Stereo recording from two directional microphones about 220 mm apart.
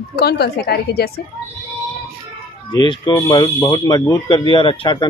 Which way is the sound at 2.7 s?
20° left (ahead or behind).